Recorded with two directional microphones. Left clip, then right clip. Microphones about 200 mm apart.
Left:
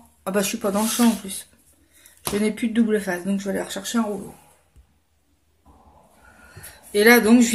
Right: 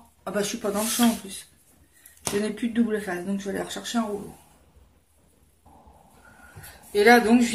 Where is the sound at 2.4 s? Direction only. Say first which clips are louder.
Left 5 dB; 40° left (ahead or behind).